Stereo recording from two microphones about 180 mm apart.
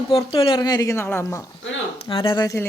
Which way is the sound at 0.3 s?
30° left (ahead or behind).